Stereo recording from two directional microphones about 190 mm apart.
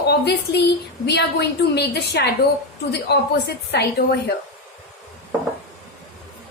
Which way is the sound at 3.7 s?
60° left (ahead or behind).